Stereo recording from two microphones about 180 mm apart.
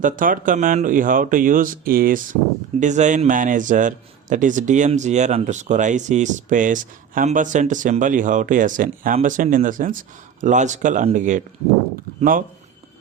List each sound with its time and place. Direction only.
0.0 s a man's voice: 50° right (ahead or behind)